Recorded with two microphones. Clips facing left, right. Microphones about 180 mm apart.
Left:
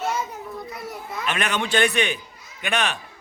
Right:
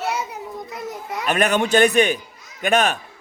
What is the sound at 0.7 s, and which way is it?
Children playing, 20° right (ahead or behind).